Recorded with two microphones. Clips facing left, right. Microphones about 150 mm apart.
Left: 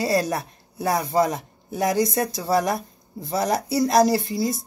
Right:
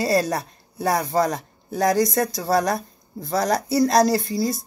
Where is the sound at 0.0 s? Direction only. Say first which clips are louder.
Right 1 dB; 20° left (ahead or behind).